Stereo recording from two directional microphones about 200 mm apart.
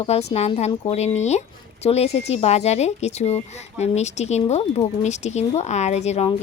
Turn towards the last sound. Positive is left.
turn(degrees=35)  # may be behind; listen again after turning